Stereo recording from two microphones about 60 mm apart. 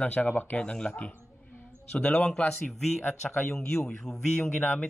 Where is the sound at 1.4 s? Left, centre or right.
Left.